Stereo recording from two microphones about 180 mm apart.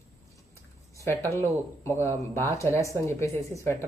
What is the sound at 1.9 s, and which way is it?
Speech, 15° left (ahead or behind).